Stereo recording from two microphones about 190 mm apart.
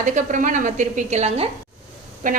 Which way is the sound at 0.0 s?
40° right (ahead or behind).